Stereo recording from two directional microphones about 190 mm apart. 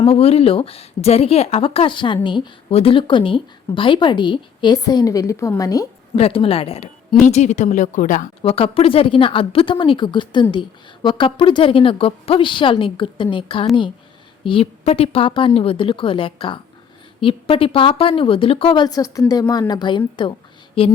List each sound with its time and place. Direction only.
0.0 s a woman's voice: 30° left (ahead or behind)
6.1 s speech: 30° left (ahead or behind)
8.4 s a woman's voice: 30° left (ahead or behind)